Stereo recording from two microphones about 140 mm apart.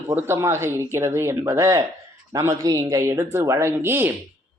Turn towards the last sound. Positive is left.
turn(degrees=-15)  # may be behind; listen again after turning